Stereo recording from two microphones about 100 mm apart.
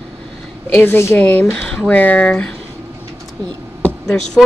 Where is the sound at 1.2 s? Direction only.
10° left (ahead or behind).